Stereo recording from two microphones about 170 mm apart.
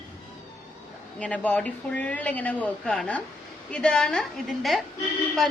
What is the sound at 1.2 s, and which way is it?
A woman's voice, 10° left (ahead or behind).